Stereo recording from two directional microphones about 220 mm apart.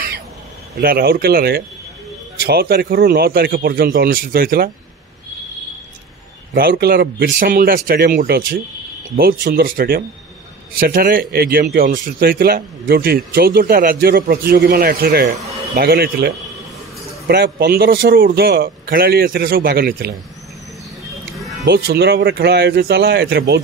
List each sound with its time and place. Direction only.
0.7 s a man's voice: 45° right (ahead or behind)
6.5 s a man's voice: 45° right (ahead or behind)
21.6 s a man's voice: 50° right (ahead or behind)